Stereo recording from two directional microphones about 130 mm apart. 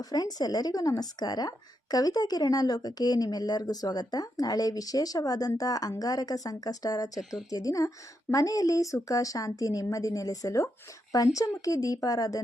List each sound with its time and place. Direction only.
0.0 s speech: 30° left (ahead or behind)
7.2 s a woman's voice: centre (ahead or behind)
7.5 s speech: 25° left (ahead or behind)